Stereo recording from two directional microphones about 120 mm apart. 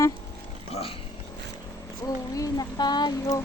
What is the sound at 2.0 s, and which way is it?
Speech, 30° left (ahead or behind).